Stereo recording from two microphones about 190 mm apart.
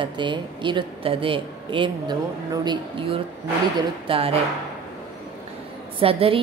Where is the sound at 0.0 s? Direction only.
25° right (ahead or behind).